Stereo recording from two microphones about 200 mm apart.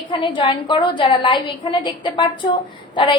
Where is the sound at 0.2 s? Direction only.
25° left (ahead or behind).